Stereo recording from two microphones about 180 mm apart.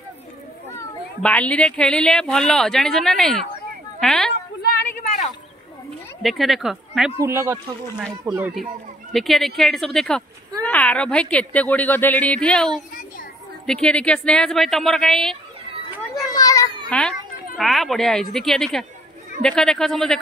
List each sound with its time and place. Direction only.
0.7 s a woman's voice: 5° left (ahead or behind)
6.2 s speech: centre (ahead or behind)
7.2 s speech: 15° right (ahead or behind)
9.1 s a woman's voice: centre (ahead or behind)
16.3 s children playing: 20° left (ahead or behind)
16.9 s speech: 5° left (ahead or behind)